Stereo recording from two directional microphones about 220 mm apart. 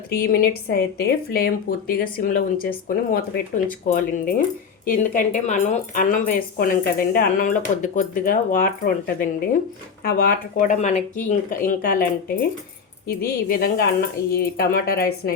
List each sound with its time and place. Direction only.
0.1 s speech: 40° left (ahead or behind)